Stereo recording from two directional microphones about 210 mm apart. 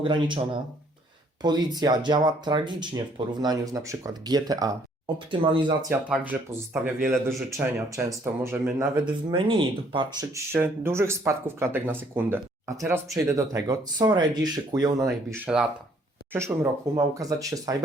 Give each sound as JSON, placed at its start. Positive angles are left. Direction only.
{"t": 0.0, "sound": "speech", "side_deg": -25}
{"t": 5.9, "sound": "speech", "side_deg": -10}
{"t": 9.3, "sound": "speech", "side_deg": -25}
{"t": 15.0, "sound": "speech", "side_deg": -5}